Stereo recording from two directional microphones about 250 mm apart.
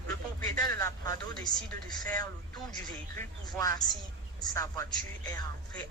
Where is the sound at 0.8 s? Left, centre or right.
Centre.